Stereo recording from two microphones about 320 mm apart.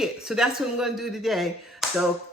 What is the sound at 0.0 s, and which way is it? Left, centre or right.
Speech, centre.